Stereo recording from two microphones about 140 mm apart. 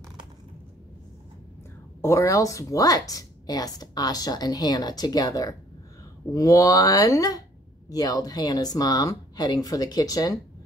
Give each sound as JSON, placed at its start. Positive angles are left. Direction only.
{"t": 2.0, "sound": "a woman's voice", "side_deg": 20}